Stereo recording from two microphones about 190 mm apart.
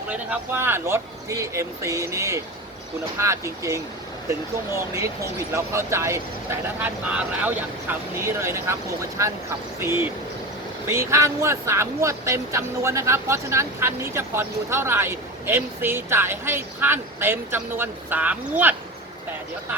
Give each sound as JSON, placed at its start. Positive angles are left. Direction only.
{"t": 0.1, "sound": "speech", "side_deg": -10}